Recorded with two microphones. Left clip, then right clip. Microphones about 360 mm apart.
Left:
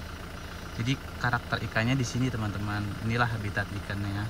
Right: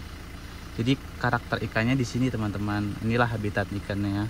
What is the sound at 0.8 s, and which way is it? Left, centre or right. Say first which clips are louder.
Speech: right 4 dB; centre.